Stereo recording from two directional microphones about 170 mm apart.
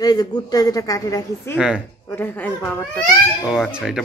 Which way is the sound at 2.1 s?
10° left (ahead or behind).